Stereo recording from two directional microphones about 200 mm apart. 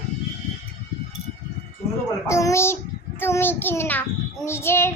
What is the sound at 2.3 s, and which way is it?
A child's voice, 15° left (ahead or behind).